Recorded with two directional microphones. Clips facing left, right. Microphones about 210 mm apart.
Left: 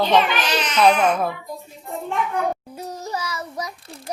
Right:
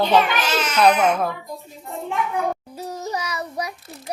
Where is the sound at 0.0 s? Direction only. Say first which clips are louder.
Even; 10° right (ahead or behind).